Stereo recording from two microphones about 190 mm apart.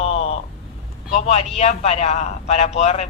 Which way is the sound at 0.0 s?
30° left (ahead or behind).